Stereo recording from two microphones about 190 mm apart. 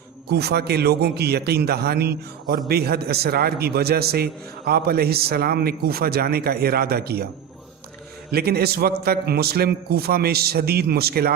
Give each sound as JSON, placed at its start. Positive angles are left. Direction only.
{"t": 0.3, "sound": "a man's voice", "side_deg": -60}
{"t": 8.3, "sound": "a man's voice", "side_deg": -55}